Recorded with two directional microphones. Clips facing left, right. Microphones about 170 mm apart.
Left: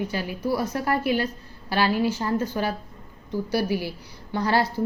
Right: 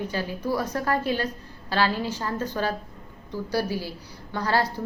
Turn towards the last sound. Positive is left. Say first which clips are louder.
# left 2 dB
turn(degrees=20)  # may be behind; listen again after turning